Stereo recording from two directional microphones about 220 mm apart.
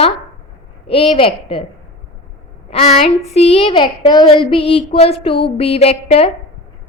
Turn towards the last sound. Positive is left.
turn(degrees=30)  # may be behind; listen again after turning